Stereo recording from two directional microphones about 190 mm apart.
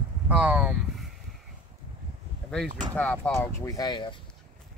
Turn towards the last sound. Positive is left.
turn(degrees=25)  # may be behind; listen again after turning